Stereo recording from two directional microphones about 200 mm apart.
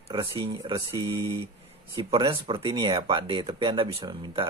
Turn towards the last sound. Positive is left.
turn(degrees=-25)  # may be behind; listen again after turning